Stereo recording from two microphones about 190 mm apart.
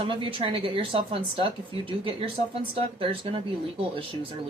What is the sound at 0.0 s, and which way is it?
Speech, 25° right (ahead or behind).